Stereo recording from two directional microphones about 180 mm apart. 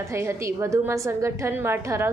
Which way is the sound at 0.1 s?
15° right (ahead or behind).